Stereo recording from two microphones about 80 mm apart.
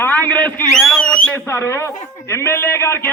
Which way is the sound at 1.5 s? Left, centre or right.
Left.